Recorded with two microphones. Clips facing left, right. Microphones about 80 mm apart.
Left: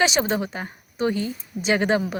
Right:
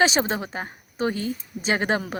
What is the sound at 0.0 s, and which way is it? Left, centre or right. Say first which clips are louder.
A woman's voice: even; right.